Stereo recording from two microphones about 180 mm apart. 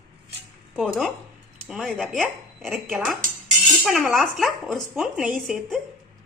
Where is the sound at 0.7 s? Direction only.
Centre (ahead or behind).